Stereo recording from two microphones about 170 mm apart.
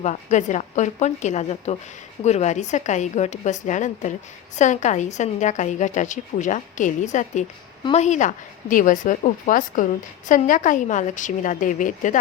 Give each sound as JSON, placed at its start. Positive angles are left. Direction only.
{"t": 0.0, "sound": "a woman's voice", "side_deg": 45}